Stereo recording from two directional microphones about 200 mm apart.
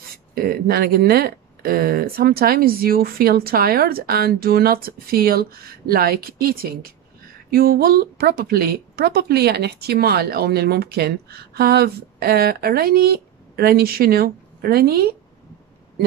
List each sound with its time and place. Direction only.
0.3 s speech: 50° right (ahead or behind)